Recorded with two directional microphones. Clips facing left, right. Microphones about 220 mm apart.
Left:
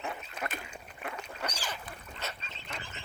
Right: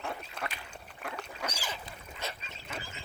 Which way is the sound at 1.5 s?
10° right (ahead or behind).